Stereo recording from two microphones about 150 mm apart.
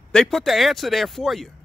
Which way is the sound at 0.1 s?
5° left (ahead or behind).